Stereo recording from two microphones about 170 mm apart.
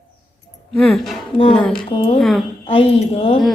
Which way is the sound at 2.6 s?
35° left (ahead or behind).